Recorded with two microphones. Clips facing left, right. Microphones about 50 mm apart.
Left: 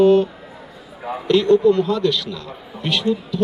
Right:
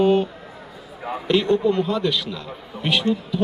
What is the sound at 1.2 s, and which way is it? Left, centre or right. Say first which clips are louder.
Speech: left 5 dB; centre.